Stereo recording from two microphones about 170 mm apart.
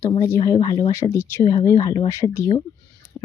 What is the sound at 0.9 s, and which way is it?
Speech, 15° left (ahead or behind).